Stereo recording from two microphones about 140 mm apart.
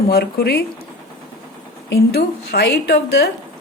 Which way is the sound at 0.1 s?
90° left.